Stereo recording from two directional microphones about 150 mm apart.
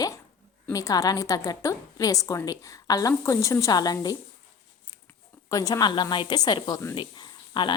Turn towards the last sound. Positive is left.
turn(degrees=30)  # may be behind; listen again after turning